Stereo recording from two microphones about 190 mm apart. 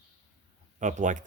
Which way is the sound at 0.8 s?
40° right (ahead or behind).